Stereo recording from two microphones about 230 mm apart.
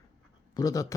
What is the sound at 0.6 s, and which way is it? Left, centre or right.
Speech, centre.